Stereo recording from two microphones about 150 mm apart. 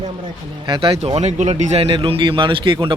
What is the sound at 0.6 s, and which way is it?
A man's voice, 35° right (ahead or behind).